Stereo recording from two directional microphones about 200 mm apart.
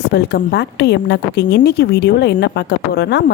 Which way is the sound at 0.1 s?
60° left (ahead or behind).